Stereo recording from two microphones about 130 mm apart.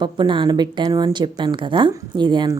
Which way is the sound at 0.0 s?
35° right (ahead or behind).